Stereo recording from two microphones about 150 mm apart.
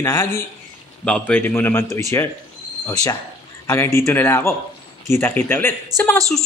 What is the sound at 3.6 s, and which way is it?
Speech, 15° left (ahead or behind).